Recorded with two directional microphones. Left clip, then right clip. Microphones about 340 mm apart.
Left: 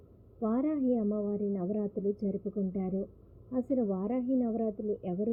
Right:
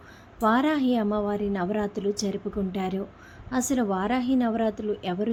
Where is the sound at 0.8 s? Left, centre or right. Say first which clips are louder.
Right 6 dB; right.